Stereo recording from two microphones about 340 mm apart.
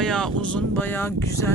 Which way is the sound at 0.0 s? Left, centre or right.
Centre.